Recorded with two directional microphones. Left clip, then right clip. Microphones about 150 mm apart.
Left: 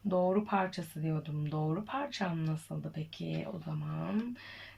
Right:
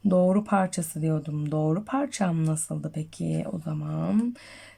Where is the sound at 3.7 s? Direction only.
65° right (ahead or behind).